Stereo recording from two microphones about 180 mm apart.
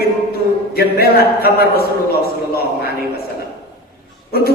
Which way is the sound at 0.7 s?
60° left (ahead or behind).